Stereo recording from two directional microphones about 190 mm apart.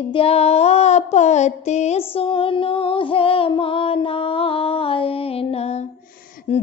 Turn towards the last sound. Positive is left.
turn(degrees=35)  # may be behind; listen again after turning